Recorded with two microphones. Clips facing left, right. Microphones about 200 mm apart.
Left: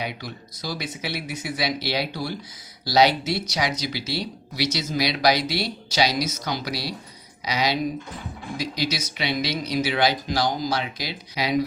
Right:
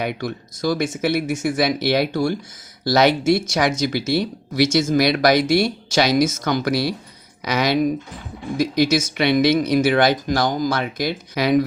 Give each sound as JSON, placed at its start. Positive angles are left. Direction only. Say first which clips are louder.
{"t": 0.0, "sound": "speech", "louder": "right 7 dB", "side_deg": -50}